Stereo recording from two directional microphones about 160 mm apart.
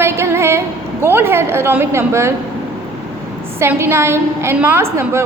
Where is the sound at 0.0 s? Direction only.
15° right (ahead or behind).